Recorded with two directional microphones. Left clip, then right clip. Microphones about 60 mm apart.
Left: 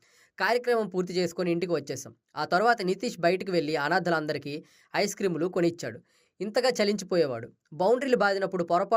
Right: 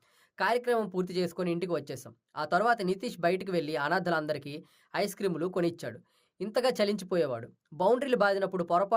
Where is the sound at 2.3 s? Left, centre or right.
Left.